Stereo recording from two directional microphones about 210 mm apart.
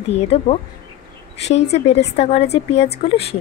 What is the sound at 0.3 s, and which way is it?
Speech, 30° left (ahead or behind).